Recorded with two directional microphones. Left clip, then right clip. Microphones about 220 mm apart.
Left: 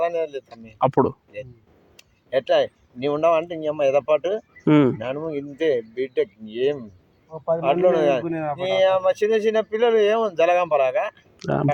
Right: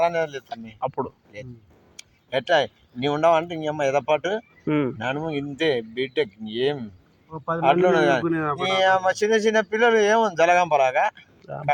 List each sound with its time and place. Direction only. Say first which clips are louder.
0.0 s speech: right 1 dB; 10° left (ahead or behind)
0.8 s speech: left 9 dB; 55° left (ahead or behind)
3.2 s speech: even; 10° left (ahead or behind)
4.6 s speech: left 8 dB; 50° left (ahead or behind)
4.9 s speech: even; 10° left (ahead or behind)
7.3 s speech: left 4 dB; 25° right (ahead or behind)
7.6 s speech: right 1 dB; 10° left (ahead or behind)
8.3 s speech: right 2 dB; 10° right (ahead or behind)
9.0 s speech: left 1 dB; 5° left (ahead or behind)
11.3 s speech: left 11 dB; 55° left (ahead or behind)